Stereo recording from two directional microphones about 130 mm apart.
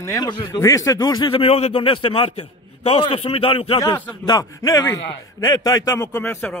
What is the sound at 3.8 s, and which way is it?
Speech, 15° left (ahead or behind).